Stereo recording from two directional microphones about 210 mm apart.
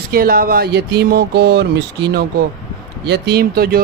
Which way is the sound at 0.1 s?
45° right (ahead or behind).